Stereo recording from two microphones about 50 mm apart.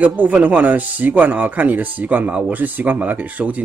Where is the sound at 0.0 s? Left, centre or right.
Right.